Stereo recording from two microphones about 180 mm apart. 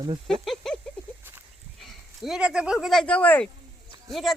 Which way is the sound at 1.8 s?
Centre (ahead or behind).